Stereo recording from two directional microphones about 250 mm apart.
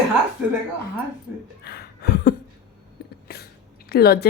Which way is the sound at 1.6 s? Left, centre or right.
Left.